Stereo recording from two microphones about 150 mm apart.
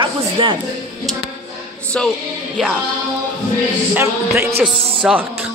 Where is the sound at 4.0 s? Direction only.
15° right (ahead or behind).